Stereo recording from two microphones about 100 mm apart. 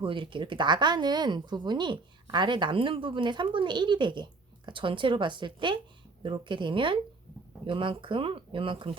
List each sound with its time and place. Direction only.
0.0 s speech: 55° right (ahead or behind)